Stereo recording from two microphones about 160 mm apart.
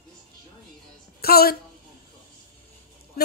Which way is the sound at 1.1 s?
75° left (ahead or behind).